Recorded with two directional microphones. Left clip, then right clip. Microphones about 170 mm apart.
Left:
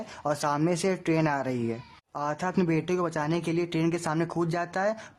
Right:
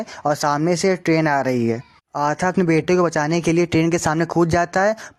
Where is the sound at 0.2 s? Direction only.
35° right (ahead or behind).